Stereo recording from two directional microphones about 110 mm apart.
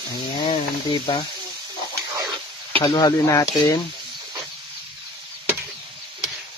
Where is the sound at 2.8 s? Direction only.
40° left (ahead or behind).